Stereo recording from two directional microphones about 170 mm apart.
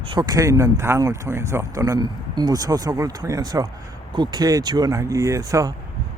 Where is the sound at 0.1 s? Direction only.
25° right (ahead or behind).